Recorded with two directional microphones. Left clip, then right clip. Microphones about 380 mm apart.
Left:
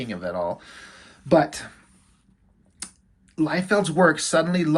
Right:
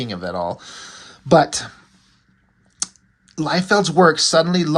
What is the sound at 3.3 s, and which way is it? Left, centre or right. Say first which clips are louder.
Speech: right 4 dB; centre.